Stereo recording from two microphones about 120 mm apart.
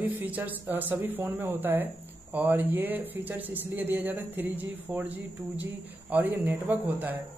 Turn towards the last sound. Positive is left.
turn(degrees=-15)  # may be behind; listen again after turning